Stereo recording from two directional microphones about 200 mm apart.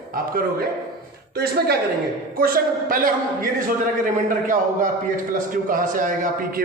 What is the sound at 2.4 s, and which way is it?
A man's voice, 45° right (ahead or behind).